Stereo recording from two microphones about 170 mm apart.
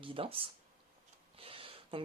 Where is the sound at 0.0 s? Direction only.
30° right (ahead or behind).